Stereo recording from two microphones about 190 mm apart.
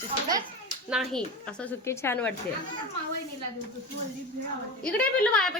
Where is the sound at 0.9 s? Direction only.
Centre (ahead or behind).